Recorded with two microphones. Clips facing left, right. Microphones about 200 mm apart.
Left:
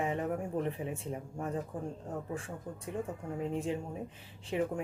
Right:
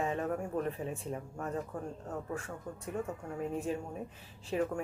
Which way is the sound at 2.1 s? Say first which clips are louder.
Even; 30° left (ahead or behind).